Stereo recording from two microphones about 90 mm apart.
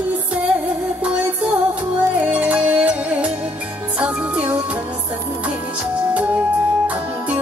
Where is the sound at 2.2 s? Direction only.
15° right (ahead or behind).